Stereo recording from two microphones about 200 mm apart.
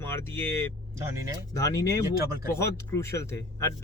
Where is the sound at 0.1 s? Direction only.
10° left (ahead or behind).